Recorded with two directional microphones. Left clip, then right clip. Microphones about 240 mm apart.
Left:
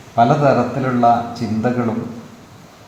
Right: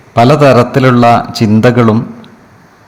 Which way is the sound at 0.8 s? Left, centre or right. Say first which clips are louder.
Right 8 dB; right.